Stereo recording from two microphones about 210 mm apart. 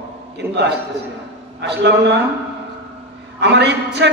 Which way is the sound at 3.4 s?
55° right (ahead or behind).